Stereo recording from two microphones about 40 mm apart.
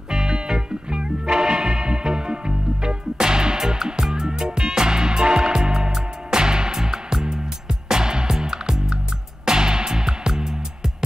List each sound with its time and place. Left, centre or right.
0.1 s music: centre